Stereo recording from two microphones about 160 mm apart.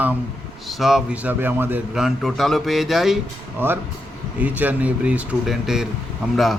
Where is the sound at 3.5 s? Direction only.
15° right (ahead or behind).